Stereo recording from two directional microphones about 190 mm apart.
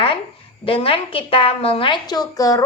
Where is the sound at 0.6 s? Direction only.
30° left (ahead or behind).